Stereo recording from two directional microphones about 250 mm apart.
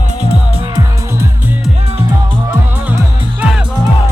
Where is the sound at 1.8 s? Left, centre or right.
Right.